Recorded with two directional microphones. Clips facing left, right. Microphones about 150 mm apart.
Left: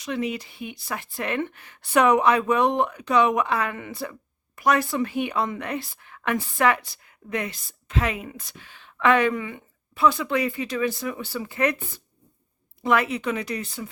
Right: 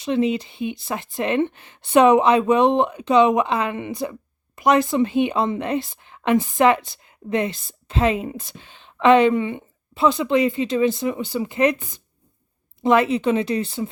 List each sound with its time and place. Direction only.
0.0 s speech: 25° right (ahead or behind)
12.8 s speech: 25° right (ahead or behind)